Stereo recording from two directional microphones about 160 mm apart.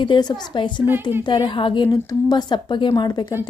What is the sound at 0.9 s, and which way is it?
Speech, 15° right (ahead or behind).